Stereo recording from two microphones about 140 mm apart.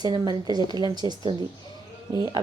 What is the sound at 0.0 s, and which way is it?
A woman's voice, 30° right (ahead or behind).